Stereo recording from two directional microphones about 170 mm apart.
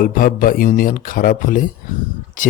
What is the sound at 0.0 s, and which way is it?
Speech, 55° left (ahead or behind).